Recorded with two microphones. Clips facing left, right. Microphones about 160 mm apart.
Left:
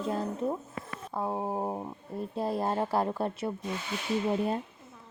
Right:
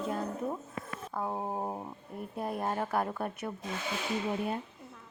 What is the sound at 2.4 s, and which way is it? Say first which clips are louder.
Speech: left 4 dB; 30° left (ahead or behind).